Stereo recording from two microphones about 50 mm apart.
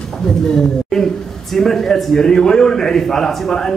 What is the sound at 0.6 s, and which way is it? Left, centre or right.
A man's voice, centre.